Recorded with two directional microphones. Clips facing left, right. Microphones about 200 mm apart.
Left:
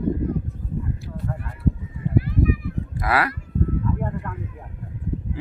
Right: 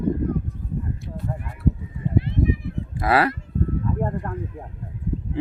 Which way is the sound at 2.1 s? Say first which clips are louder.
Left 1 dB; 25° right (ahead or behind).